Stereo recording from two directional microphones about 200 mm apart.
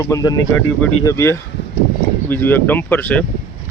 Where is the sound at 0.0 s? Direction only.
15° left (ahead or behind).